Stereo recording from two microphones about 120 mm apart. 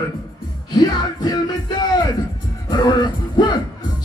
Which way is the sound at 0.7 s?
35° left (ahead or behind).